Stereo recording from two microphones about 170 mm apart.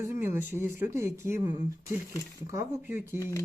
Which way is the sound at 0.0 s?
15° right (ahead or behind).